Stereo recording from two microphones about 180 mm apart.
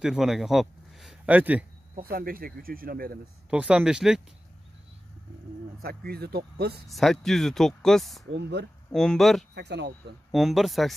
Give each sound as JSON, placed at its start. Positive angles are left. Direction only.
{"t": 0.0, "sound": "speech", "side_deg": 0}
{"t": 2.0, "sound": "speech", "side_deg": -55}
{"t": 3.4, "sound": "speech", "side_deg": -5}
{"t": 5.8, "sound": "speech", "side_deg": -60}
{"t": 6.9, "sound": "speech", "side_deg": 0}
{"t": 8.4, "sound": "speech", "side_deg": -70}
{"t": 8.9, "sound": "speech", "side_deg": 0}
{"t": 9.6, "sound": "speech", "side_deg": -70}
{"t": 10.3, "sound": "speech", "side_deg": 0}